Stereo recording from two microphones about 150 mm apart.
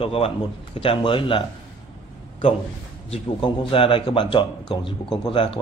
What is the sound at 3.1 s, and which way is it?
A man's voice, 40° left (ahead or behind).